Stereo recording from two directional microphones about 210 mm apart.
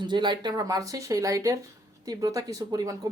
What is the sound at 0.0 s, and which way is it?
Speech, 20° right (ahead or behind).